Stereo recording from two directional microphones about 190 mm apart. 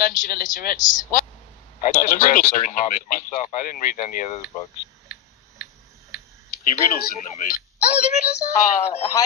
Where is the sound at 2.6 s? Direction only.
40° left (ahead or behind).